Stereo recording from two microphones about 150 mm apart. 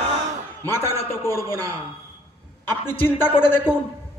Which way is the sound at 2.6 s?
15° left (ahead or behind).